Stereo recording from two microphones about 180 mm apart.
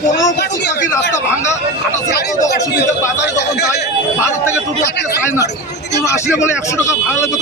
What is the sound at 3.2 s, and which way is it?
Speech, 70° left (ahead or behind).